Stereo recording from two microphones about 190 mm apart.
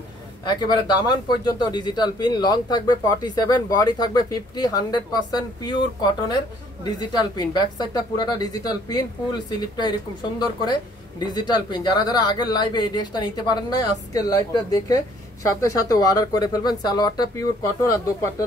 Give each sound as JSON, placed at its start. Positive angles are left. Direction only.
{"t": 0.5, "sound": "speech", "side_deg": 20}